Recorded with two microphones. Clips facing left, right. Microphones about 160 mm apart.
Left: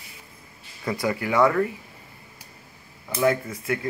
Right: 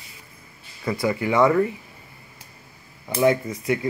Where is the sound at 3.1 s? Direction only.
15° right (ahead or behind).